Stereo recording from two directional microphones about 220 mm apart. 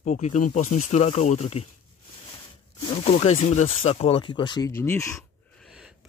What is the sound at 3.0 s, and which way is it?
Speech, 30° left (ahead or behind).